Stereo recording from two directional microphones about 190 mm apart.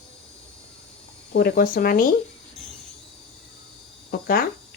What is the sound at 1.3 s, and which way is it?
Speech, 50° left (ahead or behind).